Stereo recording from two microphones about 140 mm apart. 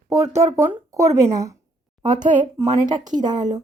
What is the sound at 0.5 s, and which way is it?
Speech, 20° right (ahead or behind).